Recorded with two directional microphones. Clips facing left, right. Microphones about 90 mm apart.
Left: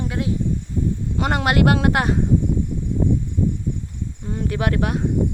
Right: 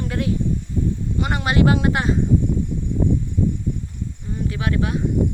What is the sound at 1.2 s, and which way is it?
Speech, 65° left (ahead or behind).